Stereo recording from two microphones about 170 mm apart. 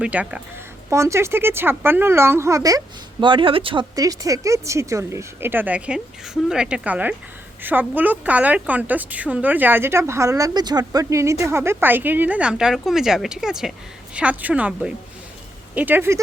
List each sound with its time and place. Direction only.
0.0 s a woman's voice: 10° right (ahead or behind)